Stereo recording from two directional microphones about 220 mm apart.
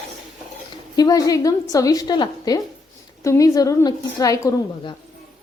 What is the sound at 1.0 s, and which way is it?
A woman's voice, 15° left (ahead or behind).